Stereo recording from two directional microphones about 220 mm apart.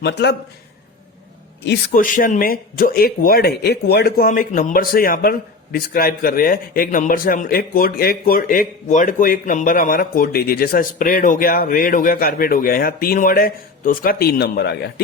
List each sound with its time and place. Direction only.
0.0 s a man's voice: 50° left (ahead or behind)
1.6 s speech: 45° left (ahead or behind)